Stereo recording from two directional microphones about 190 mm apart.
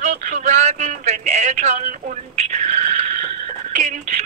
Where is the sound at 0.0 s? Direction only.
40° right (ahead or behind).